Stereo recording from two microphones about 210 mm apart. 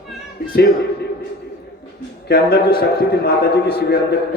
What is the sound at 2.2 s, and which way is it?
A man's voice, 45° left (ahead or behind).